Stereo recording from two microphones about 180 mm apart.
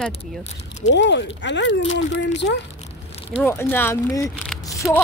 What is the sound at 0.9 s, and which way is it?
Speech, 75° left (ahead or behind).